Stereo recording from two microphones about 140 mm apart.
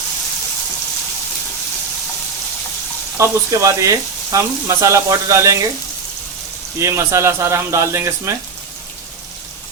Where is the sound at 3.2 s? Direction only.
20° right (ahead or behind).